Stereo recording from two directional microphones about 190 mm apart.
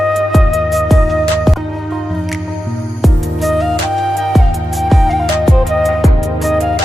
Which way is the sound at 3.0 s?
Centre (ahead or behind).